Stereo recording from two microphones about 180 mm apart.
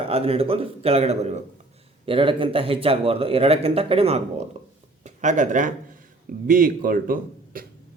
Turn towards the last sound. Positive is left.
turn(degrees=-50)  # may be behind; listen again after turning